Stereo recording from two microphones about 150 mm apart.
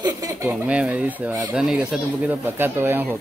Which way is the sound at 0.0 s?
25° right (ahead or behind).